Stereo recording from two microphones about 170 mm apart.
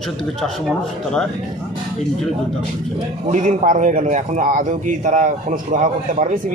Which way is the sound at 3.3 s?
45° right (ahead or behind).